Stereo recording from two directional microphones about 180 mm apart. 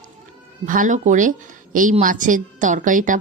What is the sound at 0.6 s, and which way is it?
A woman's voice, 45° right (ahead or behind).